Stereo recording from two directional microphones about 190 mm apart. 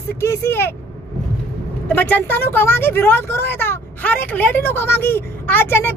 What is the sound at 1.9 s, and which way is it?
Speech, 10° left (ahead or behind).